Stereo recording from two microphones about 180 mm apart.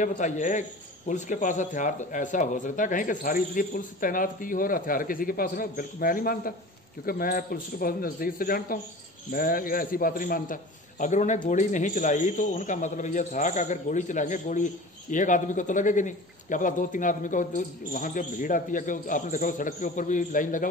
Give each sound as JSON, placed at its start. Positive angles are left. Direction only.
{"t": 0.0, "sound": "a man's voice", "side_deg": 45}